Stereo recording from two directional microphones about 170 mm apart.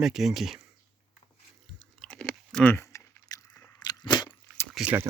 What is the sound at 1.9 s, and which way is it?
Biting, 5° left (ahead or behind).